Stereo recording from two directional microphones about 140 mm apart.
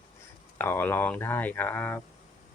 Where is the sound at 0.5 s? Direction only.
15° left (ahead or behind).